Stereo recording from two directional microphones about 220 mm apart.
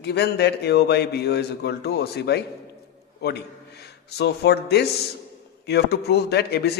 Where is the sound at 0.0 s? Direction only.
50° left (ahead or behind).